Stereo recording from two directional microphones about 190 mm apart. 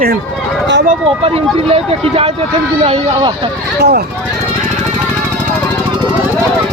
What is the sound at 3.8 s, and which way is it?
Speech, 60° right (ahead or behind).